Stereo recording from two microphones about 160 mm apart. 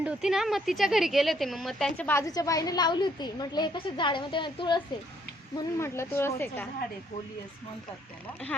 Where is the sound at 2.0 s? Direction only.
20° left (ahead or behind).